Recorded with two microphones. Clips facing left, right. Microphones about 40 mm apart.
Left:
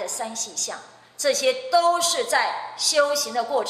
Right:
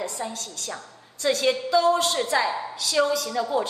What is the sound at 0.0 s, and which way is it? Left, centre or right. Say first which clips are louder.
Speech: left 1 dB; left.